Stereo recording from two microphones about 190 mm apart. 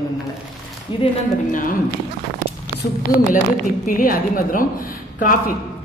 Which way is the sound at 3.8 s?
45° left (ahead or behind).